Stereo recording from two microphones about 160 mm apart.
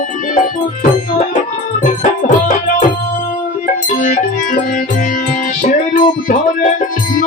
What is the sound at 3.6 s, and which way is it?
Music, 55° left (ahead or behind).